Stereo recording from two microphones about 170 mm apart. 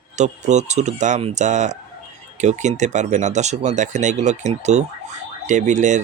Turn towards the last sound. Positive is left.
turn(degrees=-45)  # may be behind; listen again after turning